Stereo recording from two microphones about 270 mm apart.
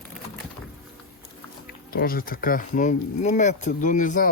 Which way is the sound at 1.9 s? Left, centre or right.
Left.